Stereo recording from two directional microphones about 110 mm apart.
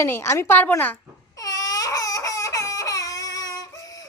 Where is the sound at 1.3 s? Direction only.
30° left (ahead or behind).